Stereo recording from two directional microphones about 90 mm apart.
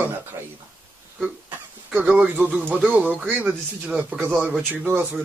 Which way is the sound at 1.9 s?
10° right (ahead or behind).